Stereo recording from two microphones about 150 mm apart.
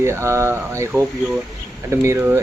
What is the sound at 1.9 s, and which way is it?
Speech, 20° right (ahead or behind).